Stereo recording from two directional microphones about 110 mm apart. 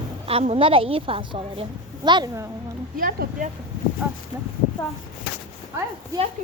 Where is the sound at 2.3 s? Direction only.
25° right (ahead or behind).